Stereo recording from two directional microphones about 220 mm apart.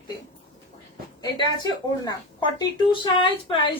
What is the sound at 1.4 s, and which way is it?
Speech, 20° left (ahead or behind).